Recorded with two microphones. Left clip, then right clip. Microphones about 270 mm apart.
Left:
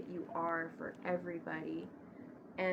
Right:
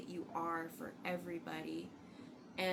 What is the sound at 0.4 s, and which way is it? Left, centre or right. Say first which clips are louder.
A woman's voice: left 4 dB; centre.